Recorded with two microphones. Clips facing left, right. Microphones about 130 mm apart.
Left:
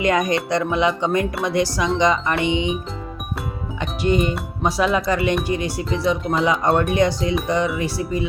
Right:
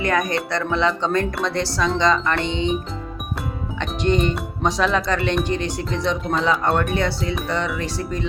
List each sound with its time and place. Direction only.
0.0 s speech: 20° left (ahead or behind)
3.8 s speech: 10° left (ahead or behind)
6.9 s speech: 15° left (ahead or behind)